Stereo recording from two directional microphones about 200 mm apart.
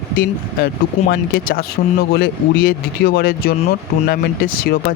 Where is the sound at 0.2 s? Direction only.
45° left (ahead or behind).